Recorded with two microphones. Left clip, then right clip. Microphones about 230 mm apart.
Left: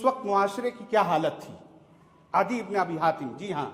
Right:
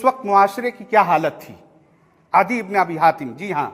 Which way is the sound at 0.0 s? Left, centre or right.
Right.